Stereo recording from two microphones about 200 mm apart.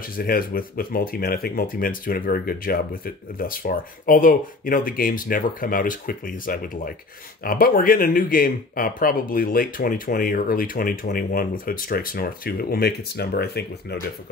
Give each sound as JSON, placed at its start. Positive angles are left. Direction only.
{"t": 0.0, "sound": "speech", "side_deg": 45}